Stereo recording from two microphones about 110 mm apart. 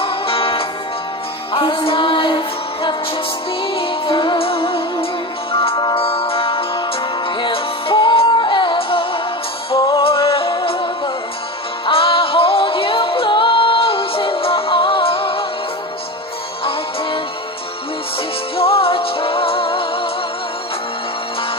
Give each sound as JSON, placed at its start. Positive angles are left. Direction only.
{"t": 0.0, "sound": "music", "side_deg": 55}
{"t": 18.6, "sound": "music", "side_deg": 55}